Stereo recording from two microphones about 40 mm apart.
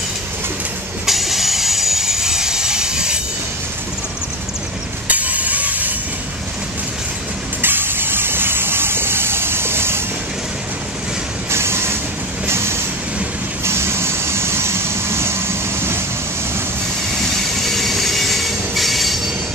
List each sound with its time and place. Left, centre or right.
1.0 s train: centre
5.0 s train: right
7.6 s a sound: right
11.5 s train: right
13.7 s vehicle: right
17.2 s train: centre